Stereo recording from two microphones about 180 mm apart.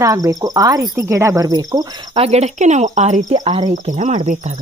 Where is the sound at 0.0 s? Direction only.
20° right (ahead or behind).